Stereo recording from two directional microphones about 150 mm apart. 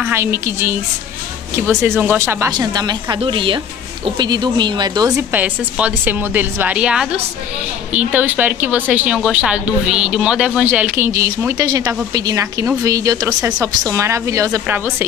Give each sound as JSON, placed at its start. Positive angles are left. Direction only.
{"t": 0.1, "sound": "speech", "side_deg": -15}
{"t": 2.5, "sound": "a woman's voice", "side_deg": -25}
{"t": 5.3, "sound": "a woman's voice", "side_deg": -10}